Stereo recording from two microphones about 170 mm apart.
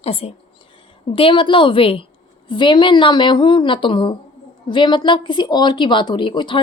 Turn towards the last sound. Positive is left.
turn(degrees=30)  # may be behind; listen again after turning